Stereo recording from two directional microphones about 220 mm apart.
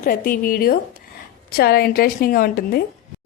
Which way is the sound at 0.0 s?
40° left (ahead or behind).